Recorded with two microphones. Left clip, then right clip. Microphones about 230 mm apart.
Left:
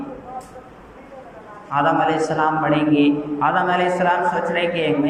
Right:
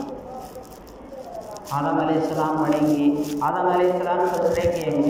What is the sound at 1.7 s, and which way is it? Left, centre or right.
A man's voice, left.